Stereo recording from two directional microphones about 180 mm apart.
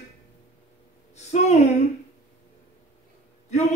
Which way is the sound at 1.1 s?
40° left (ahead or behind).